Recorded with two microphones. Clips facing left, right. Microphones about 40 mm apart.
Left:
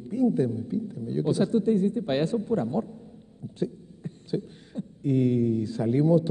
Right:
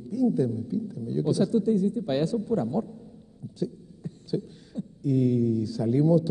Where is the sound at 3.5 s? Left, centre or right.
Left.